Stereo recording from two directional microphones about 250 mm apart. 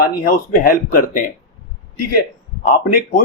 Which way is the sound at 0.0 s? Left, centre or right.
Left.